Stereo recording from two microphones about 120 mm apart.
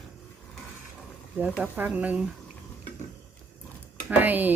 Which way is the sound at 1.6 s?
10° right (ahead or behind).